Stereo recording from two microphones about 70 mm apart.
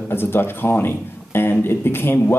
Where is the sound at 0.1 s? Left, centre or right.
Left.